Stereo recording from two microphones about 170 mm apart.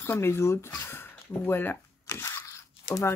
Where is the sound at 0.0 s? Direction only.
15° left (ahead or behind).